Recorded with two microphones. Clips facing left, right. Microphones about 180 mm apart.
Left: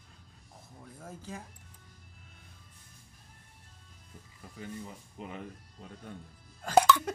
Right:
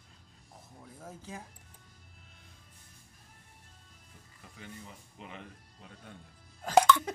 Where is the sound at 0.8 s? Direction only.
5° right (ahead or behind).